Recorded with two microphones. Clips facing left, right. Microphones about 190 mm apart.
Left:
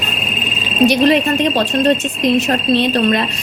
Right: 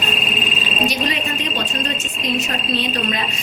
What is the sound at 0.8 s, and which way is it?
A woman's voice, 65° left (ahead or behind).